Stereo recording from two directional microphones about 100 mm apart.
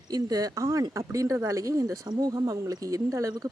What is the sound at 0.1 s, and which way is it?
Speech, 40° right (ahead or behind).